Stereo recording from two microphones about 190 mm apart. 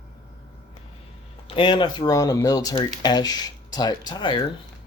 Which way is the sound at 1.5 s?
25° left (ahead or behind).